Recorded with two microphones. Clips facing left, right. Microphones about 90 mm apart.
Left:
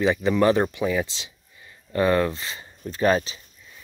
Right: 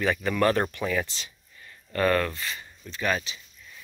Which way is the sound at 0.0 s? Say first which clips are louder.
Left 4 dB; 15° left (ahead or behind).